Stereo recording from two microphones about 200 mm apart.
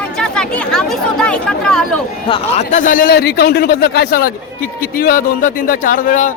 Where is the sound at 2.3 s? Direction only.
35° left (ahead or behind).